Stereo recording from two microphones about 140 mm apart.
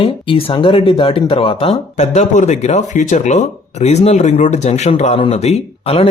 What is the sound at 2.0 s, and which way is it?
Speech, 55° left (ahead or behind).